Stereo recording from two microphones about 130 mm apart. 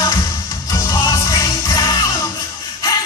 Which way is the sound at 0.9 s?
25° left (ahead or behind).